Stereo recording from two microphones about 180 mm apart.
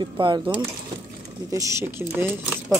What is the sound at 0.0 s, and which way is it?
Speech, 25° right (ahead or behind).